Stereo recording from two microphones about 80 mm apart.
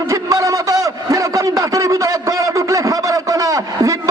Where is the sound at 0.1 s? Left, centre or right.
Right.